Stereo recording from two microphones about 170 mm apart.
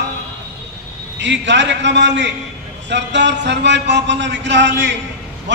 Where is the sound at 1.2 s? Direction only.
90° right.